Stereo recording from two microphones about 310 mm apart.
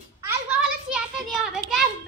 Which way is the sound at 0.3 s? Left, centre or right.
Centre.